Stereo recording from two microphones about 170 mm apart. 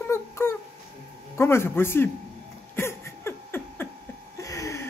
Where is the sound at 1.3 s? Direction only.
15° left (ahead or behind).